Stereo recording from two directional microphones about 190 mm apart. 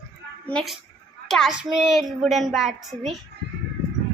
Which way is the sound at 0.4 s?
5° left (ahead or behind).